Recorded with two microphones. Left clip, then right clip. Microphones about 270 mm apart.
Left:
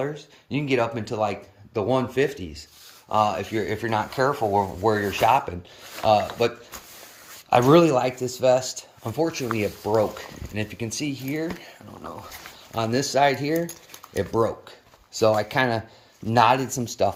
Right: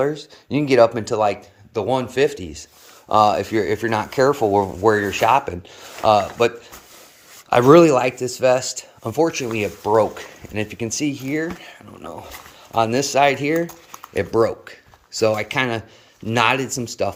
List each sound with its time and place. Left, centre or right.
0.0 s speech: right
3.1 s speech: right
4.9 s speech: centre
7.7 s speech: centre
12.7 s speech: centre